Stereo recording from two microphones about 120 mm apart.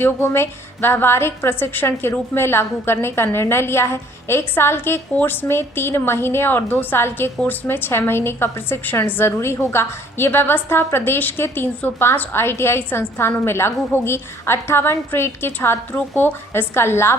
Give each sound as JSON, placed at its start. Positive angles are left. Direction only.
{"t": 0.0, "sound": "a woman's voice", "side_deg": 20}